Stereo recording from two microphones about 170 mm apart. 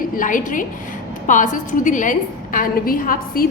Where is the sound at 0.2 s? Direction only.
50° left (ahead or behind).